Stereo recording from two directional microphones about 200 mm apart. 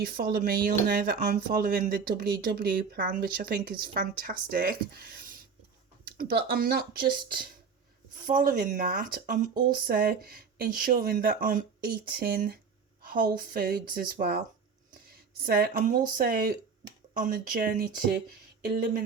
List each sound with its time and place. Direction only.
0.0 s speech: 45° right (ahead or behind)